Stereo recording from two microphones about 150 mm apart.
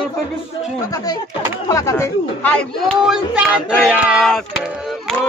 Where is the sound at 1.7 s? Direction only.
20° left (ahead or behind).